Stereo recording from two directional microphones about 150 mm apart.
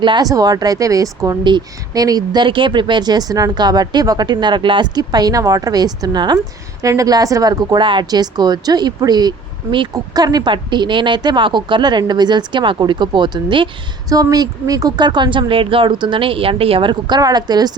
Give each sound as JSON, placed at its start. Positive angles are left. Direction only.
{"t": 0.0, "sound": "a woman's voice", "side_deg": -30}